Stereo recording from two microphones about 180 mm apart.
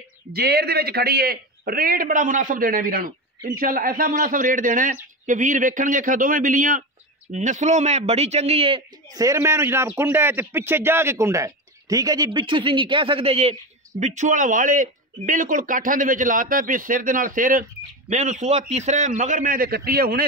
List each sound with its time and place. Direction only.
0.3 s a man's voice: 60° right (ahead or behind)